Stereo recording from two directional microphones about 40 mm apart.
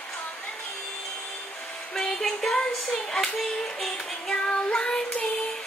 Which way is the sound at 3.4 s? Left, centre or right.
Centre.